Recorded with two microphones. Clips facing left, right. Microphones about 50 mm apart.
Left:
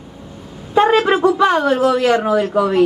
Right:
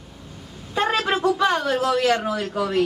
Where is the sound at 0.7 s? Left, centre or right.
Left.